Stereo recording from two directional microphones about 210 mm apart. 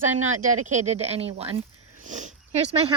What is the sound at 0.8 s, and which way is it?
Speech, 30° right (ahead or behind).